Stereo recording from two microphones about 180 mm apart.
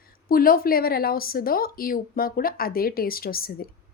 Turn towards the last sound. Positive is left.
turn(degrees=55)  # may be behind; listen again after turning